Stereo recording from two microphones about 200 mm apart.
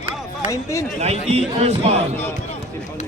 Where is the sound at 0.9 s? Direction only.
30° right (ahead or behind).